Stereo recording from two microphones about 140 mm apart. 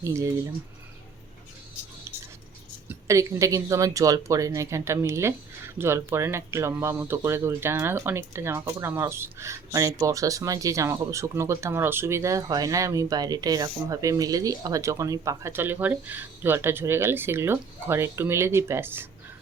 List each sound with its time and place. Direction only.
0.0 s speech: 20° right (ahead or behind)
2.9 s speech: 20° right (ahead or behind)